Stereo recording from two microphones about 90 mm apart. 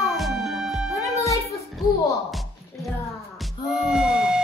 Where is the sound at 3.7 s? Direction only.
5° right (ahead or behind).